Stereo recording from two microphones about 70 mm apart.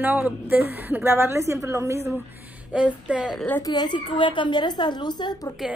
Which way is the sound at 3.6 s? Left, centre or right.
Left.